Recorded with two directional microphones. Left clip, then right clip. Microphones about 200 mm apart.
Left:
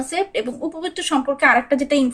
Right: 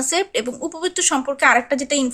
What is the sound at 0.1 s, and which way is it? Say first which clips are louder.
A woman's voice: right 1 dB; 30° right (ahead or behind).